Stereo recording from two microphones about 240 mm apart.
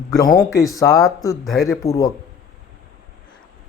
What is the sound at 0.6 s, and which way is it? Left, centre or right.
Speech, centre.